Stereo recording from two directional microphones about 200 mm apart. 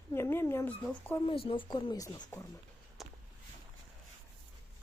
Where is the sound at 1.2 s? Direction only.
25° left (ahead or behind).